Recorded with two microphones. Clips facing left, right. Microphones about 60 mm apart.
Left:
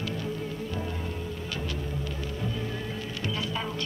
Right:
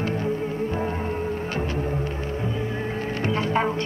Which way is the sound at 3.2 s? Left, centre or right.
Right.